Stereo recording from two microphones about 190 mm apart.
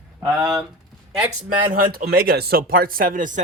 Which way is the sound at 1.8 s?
55° right (ahead or behind).